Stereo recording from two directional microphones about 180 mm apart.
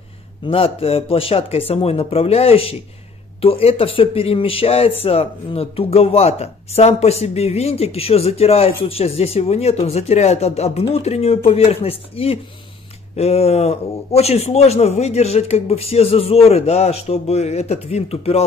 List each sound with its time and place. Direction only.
0.5 s speech: 30° left (ahead or behind)